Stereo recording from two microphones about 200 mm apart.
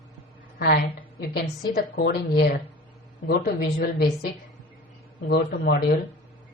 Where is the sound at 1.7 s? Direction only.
45° left (ahead or behind).